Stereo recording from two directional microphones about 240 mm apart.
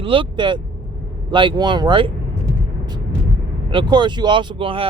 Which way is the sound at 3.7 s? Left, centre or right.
Centre.